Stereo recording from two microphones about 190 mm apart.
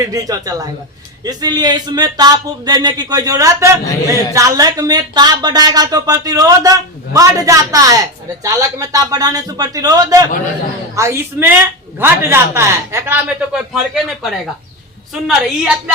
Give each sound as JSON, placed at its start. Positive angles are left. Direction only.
{"t": 0.0, "sound": "a woman's voice", "side_deg": -20}